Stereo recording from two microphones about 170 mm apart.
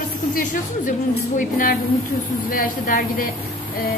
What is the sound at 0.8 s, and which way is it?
A woman's voice, 50° left (ahead or behind).